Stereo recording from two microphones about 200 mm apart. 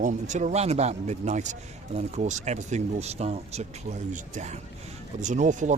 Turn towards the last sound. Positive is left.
turn(degrees=-40)  # may be behind; listen again after turning